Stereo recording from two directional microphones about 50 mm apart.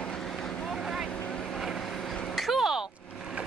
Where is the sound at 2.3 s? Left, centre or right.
Centre.